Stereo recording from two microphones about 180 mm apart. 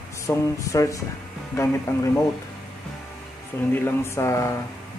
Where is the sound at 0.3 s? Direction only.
20° left (ahead or behind).